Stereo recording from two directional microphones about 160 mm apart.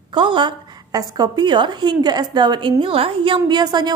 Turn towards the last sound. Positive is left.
turn(degrees=-25)  # may be behind; listen again after turning